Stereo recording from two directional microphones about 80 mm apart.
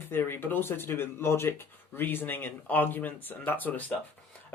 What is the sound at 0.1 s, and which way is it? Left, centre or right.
Speech, left.